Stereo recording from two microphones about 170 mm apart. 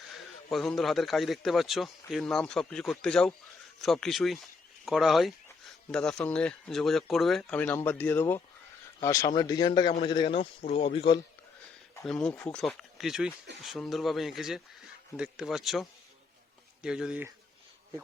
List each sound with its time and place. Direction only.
0.5 s a man's voice: centre (ahead or behind); by 11.2 s 35° left (ahead or behind)
12.0 s a man's voice: 5° left (ahead or behind)